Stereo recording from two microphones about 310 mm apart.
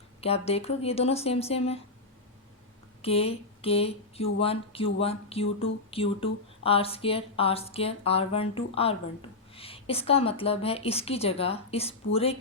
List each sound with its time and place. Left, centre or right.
0.2 s a woman's voice: centre
3.0 s a woman's voice: centre